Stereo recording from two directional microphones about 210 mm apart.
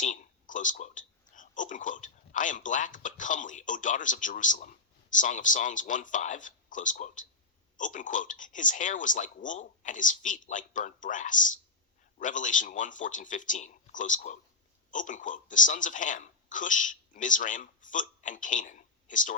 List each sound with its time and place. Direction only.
0.0 s speech: 40° left (ahead or behind)